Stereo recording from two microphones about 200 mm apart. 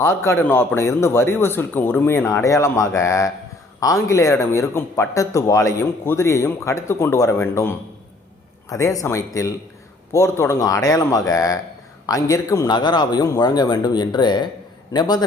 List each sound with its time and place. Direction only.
0.3 s speech: 10° left (ahead or behind)
8.7 s a man's voice: 15° left (ahead or behind)